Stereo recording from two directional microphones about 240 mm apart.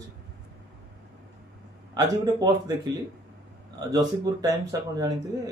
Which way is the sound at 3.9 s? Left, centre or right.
Centre.